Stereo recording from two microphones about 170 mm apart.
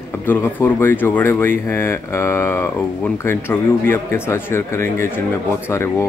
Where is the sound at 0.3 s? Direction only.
15° left (ahead or behind).